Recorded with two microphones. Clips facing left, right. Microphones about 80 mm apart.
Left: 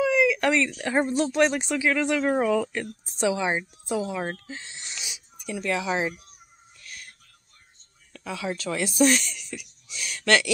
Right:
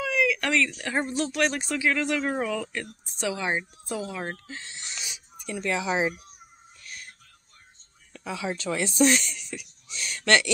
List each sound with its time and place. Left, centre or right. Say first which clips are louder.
0.0 s a woman's voice: left 4 dB; left
5.5 s speech: left 1 dB; centre
6.8 s music: even; centre
8.1 s speech: even; centre